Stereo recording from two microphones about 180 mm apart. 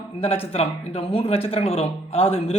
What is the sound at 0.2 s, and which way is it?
A man's voice, 35° left (ahead or behind).